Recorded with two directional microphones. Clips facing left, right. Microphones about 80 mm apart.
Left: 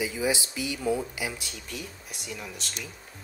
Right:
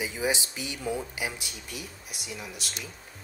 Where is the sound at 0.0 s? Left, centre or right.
Right.